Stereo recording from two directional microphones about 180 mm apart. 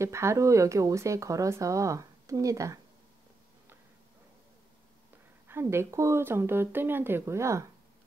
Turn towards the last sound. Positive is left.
turn(degrees=-15)  # may be behind; listen again after turning